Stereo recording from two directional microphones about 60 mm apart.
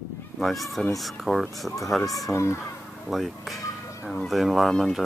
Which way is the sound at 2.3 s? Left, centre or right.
Left.